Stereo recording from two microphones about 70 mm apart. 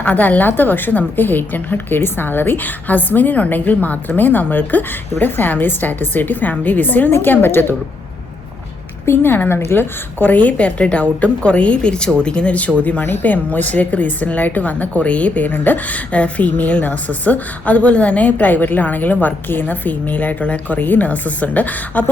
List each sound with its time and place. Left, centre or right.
0.0 s a woman's voice: left
9.0 s a woman's voice: left